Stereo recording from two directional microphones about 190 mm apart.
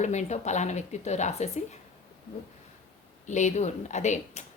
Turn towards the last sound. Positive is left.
turn(degrees=40)  # may be behind; listen again after turning